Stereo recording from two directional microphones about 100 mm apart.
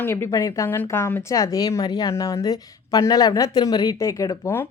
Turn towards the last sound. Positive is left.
turn(degrees=35)  # may be behind; listen again after turning